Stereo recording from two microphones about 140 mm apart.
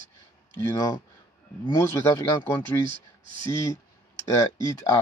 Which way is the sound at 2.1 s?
15° left (ahead or behind).